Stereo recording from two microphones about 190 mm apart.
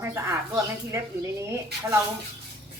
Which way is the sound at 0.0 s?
15° right (ahead or behind).